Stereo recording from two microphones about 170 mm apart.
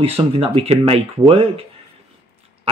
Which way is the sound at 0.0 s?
35° right (ahead or behind).